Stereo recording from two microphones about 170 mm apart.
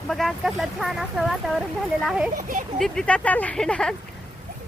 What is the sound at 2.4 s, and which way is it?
Speech, 55° right (ahead or behind).